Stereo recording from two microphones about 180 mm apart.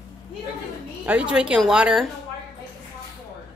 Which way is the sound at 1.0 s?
5° right (ahead or behind).